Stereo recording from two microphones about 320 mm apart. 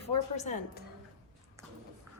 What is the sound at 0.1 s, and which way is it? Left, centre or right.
Speech, left.